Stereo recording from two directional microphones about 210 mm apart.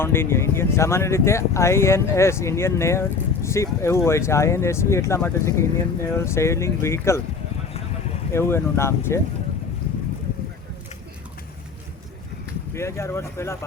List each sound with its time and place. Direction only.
0.0 s speech: 10° left (ahead or behind)
8.3 s speech: 10° left (ahead or behind)
12.7 s speech: 15° left (ahead or behind)